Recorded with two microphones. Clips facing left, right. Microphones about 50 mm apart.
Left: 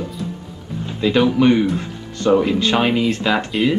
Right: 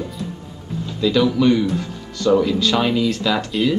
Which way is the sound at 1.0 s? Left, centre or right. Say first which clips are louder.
Left 1 dB; left.